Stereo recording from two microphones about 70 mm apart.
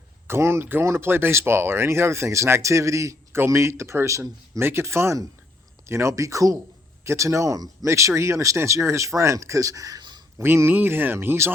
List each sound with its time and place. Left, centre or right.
0.3 s speech: right
7.9 s speech: right
10.3 s speech: right